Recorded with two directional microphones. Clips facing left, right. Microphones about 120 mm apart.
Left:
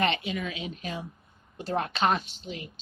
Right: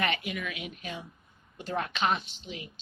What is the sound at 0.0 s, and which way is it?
A woman's voice, 30° left (ahead or behind).